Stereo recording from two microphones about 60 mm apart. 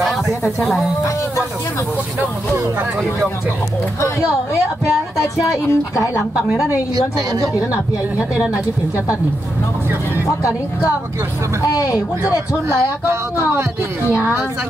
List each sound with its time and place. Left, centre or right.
0.0 s a sound: centre
5.2 s speech: left
12.6 s speech: right